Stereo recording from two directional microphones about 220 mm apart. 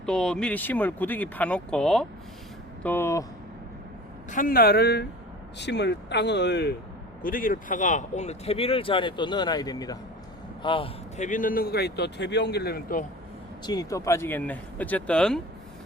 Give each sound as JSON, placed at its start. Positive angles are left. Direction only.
{"t": 0.0, "sound": "speech", "side_deg": 5}
{"t": 4.3, "sound": "a man's voice", "side_deg": 40}
{"t": 13.7, "sound": "speech", "side_deg": 15}